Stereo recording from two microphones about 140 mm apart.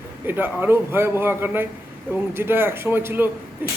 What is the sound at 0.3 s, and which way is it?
Speech, 15° right (ahead or behind).